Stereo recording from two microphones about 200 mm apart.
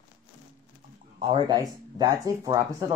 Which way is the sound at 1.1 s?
25° right (ahead or behind).